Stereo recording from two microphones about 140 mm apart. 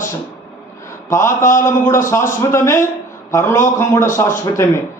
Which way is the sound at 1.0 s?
20° left (ahead or behind).